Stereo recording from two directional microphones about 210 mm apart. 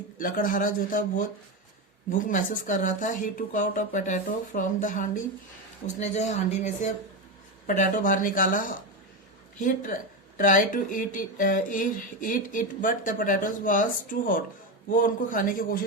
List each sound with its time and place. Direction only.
0.2 s speech: 40° left (ahead or behind)